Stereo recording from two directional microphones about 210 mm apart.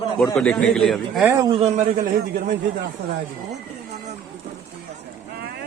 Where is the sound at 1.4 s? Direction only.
25° right (ahead or behind).